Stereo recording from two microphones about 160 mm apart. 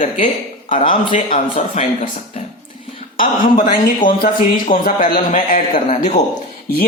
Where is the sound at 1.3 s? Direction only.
40° left (ahead or behind).